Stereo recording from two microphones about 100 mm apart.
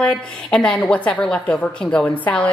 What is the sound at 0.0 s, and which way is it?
A woman's voice, 10° left (ahead or behind).